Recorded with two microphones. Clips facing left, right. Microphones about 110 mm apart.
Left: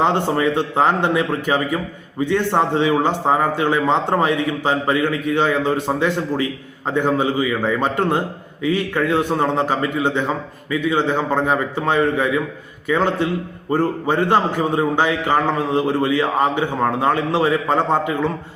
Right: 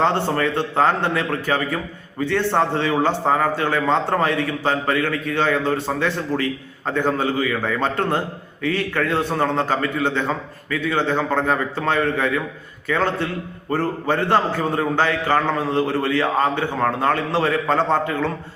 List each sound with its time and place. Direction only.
0.0 s a man's voice: 15° left (ahead or behind)